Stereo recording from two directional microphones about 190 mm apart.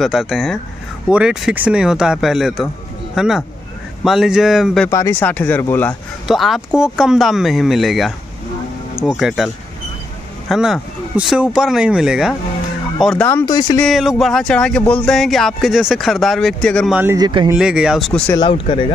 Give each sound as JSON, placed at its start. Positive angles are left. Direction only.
{"t": 0.0, "sound": "speech", "side_deg": 0}
{"t": 4.8, "sound": "speech", "side_deg": 15}
{"t": 6.2, "sound": "speech", "side_deg": 0}
{"t": 10.5, "sound": "speech", "side_deg": 0}
{"t": 13.7, "sound": "speech", "side_deg": 0}
{"t": 16.9, "sound": "speech", "side_deg": -10}
{"t": 17.2, "sound": "speech", "side_deg": -25}
{"t": 17.6, "sound": "speech", "side_deg": -5}
{"t": 18.3, "sound": "speech", "side_deg": 25}